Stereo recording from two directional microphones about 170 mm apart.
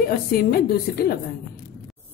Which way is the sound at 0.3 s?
60° left (ahead or behind).